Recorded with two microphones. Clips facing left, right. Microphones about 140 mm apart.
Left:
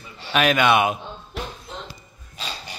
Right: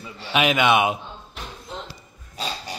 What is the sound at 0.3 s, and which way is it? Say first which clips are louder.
Speech: left 1 dB; 15° right (ahead or behind).